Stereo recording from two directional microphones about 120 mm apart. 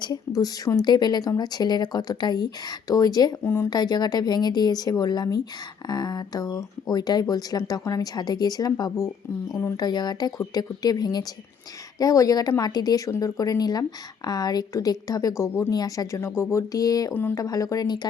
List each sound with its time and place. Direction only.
0.0 s speech: 30° left (ahead or behind)
3.4 s speech: 20° left (ahead or behind)
3.7 s speech: 35° left (ahead or behind)